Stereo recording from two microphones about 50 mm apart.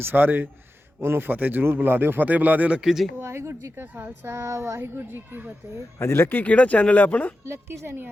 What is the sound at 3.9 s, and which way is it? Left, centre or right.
Speech, right.